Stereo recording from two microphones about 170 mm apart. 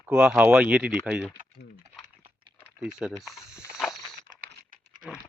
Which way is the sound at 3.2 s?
Centre (ahead or behind).